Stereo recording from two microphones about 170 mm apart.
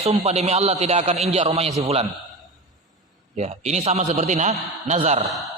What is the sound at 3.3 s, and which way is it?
A man's voice, 40° right (ahead or behind).